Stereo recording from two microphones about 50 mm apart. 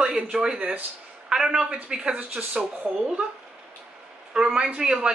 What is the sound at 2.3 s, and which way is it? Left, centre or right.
Speech, right.